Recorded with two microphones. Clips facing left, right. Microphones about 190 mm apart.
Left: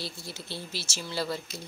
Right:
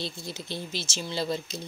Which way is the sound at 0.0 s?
20° right (ahead or behind).